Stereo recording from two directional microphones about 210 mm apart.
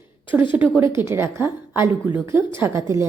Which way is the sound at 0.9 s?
10° right (ahead or behind).